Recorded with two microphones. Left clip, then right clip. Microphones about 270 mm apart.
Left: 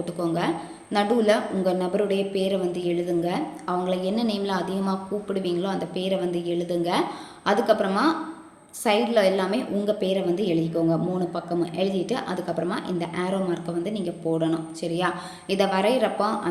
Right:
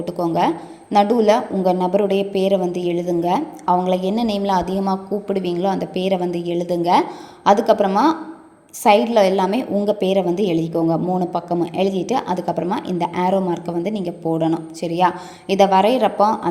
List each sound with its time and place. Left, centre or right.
0.3 s a woman's voice: right